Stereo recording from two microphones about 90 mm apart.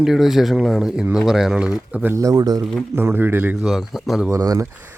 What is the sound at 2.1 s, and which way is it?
Speech, 40° right (ahead or behind).